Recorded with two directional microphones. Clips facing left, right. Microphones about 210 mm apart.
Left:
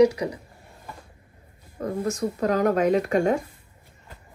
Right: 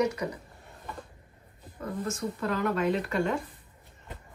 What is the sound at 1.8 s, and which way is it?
Speech, 40° left (ahead or behind).